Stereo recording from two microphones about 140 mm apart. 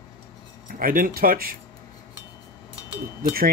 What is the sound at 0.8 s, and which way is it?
Speech, 85° right.